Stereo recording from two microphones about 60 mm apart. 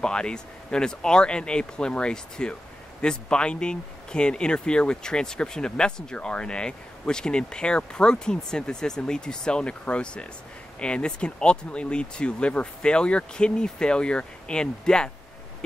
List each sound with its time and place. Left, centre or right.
0.0 s speech: centre